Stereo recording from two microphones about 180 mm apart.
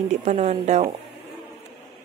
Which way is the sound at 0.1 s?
40° right (ahead or behind).